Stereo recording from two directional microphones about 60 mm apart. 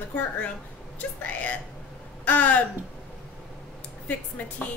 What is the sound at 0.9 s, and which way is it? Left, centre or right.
A woman's voice, left.